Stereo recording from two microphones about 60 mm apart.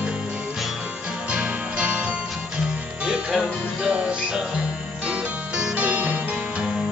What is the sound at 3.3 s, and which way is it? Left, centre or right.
Music, centre.